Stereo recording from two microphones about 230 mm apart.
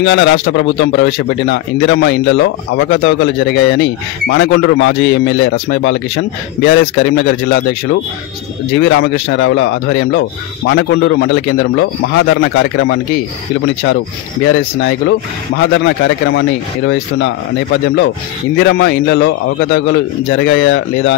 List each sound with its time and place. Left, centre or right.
0.0 s a man's voice: left
8.7 s a man's voice: left
14.4 s a man's voice: left
18.6 s a man's voice: left